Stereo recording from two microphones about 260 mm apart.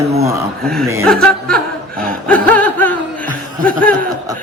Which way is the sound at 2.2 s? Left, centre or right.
Centre.